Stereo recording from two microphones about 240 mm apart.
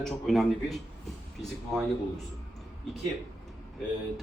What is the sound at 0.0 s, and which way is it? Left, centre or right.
A man's voice, centre.